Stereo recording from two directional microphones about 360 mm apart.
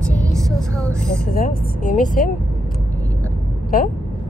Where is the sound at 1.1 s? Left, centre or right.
Left.